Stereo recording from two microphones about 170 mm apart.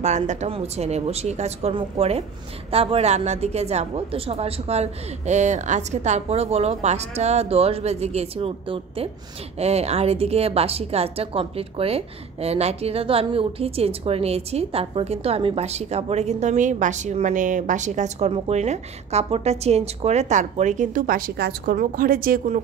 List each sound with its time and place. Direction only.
0.0 s a woman's voice: 45° right (ahead or behind)
21.4 s a woman's voice: 60° right (ahead or behind)